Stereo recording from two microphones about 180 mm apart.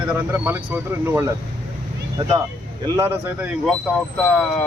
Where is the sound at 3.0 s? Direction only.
10° right (ahead or behind).